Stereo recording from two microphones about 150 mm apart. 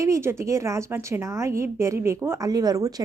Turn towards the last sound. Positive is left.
turn(degrees=-25)  # may be behind; listen again after turning